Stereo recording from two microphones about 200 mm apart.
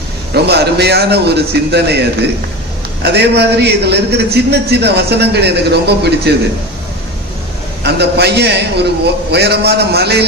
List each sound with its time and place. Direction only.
0.4 s a man's voice: 55° right (ahead or behind)
3.0 s a man's voice: 55° right (ahead or behind)
7.9 s a man's voice: 55° right (ahead or behind)